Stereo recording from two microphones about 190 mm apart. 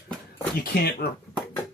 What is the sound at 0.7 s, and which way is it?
Speech, 55° left (ahead or behind).